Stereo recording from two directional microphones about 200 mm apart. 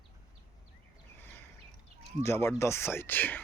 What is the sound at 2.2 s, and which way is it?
Speech, 15° left (ahead or behind).